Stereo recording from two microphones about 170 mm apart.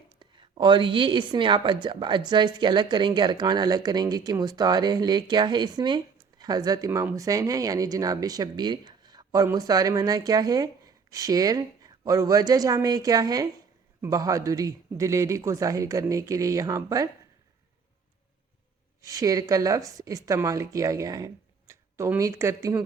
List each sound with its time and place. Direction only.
0.2 s speech: 25° right (ahead or behind)
19.0 s speech: 20° right (ahead or behind)